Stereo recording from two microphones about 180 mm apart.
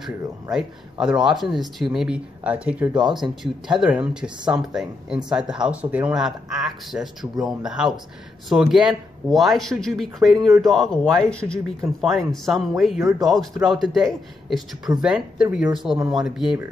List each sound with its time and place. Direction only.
0.0 s speech: centre (ahead or behind)
2.9 s speech: 25° right (ahead or behind)
3.2 s speech: 5° right (ahead or behind)